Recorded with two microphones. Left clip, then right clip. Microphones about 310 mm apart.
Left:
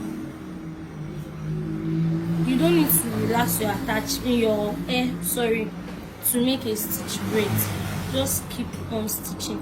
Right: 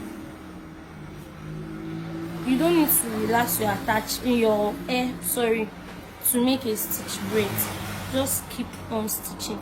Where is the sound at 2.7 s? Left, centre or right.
Centre.